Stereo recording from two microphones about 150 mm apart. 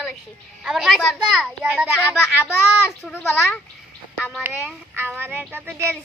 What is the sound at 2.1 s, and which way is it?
A child's voice, 15° left (ahead or behind).